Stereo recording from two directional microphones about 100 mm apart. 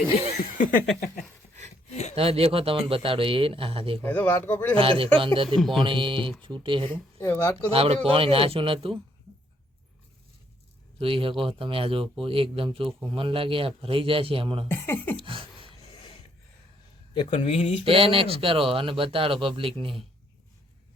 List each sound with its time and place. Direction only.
2.1 s speech: 75° right (ahead or behind)
4.0 s speech: 20° left (ahead or behind)
4.8 s speech: 65° right (ahead or behind)
7.2 s speech: 25° left (ahead or behind)
7.7 s speech: 70° right (ahead or behind)
11.0 s speech: 60° right (ahead or behind)
14.7 s speech: 20° left (ahead or behind)
15.1 s a sound: 60° right (ahead or behind)
15.8 s a sound: 75° left (ahead or behind)
17.2 s speech: 55° left (ahead or behind)
17.5 s speech: 90° left
17.8 s speech: 65° right (ahead or behind)